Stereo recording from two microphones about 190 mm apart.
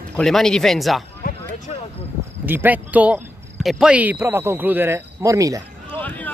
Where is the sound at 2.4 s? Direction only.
10° right (ahead or behind).